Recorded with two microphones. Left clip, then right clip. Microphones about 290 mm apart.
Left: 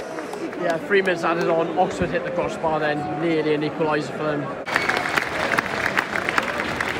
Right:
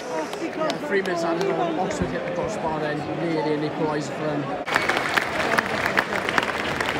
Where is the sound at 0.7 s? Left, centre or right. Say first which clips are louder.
Left 6 dB; centre.